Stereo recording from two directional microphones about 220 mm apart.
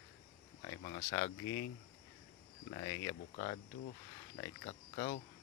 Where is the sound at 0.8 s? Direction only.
30° left (ahead or behind).